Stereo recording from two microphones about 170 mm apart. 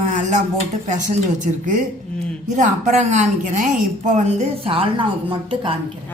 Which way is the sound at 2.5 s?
45° right (ahead or behind).